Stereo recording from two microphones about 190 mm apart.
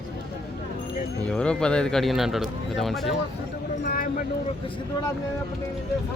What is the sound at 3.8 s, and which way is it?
Speech, 50° left (ahead or behind).